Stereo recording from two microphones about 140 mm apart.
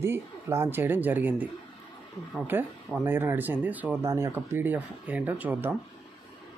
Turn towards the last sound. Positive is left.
turn(degrees=-15)  # may be behind; listen again after turning